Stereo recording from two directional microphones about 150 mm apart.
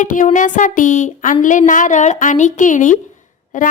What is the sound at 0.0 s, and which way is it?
A woman's voice, 60° left (ahead or behind).